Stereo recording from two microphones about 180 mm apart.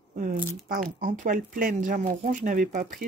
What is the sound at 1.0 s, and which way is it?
Speech, 45° right (ahead or behind).